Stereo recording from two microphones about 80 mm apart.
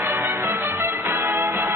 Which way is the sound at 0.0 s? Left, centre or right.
Right.